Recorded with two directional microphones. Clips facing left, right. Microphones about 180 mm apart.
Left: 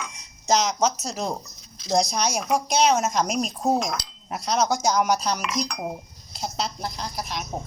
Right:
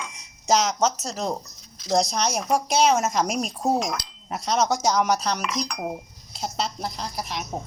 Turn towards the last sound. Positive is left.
turn(degrees=0)  # may be behind; listen again after turning